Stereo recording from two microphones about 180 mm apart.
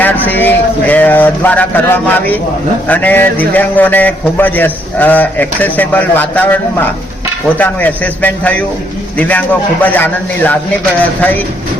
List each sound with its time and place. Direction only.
0.3 s a man's voice: 10° left (ahead or behind)